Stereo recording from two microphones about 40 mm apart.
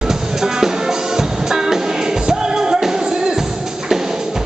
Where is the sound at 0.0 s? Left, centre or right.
Centre.